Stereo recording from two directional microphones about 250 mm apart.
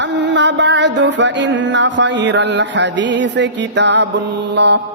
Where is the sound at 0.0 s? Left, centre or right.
Right.